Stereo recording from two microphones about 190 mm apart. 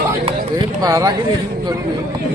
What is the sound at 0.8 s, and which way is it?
Speech, 20° right (ahead or behind).